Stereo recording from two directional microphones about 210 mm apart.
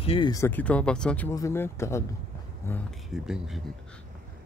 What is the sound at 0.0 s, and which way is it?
Speech, 25° left (ahead or behind).